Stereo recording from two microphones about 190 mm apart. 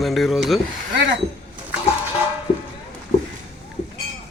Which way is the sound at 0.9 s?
70° right (ahead or behind).